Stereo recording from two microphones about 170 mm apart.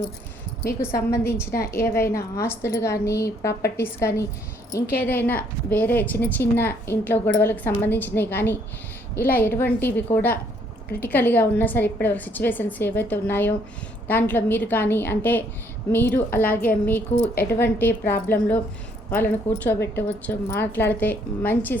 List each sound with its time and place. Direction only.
0.9 s a woman's voice: 65° left (ahead or behind)
1.2 s a woman's voice: 15° left (ahead or behind)